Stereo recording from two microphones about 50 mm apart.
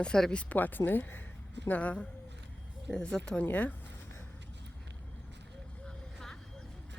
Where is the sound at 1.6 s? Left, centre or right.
Left.